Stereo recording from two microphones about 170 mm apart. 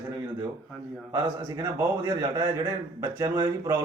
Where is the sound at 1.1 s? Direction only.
20° right (ahead or behind).